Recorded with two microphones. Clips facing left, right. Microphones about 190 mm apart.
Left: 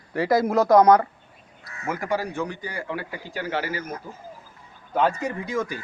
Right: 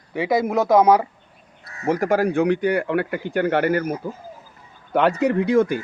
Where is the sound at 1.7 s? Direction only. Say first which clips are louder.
Right 7 dB; 35° right (ahead or behind); by 3.9 s 60° right (ahead or behind).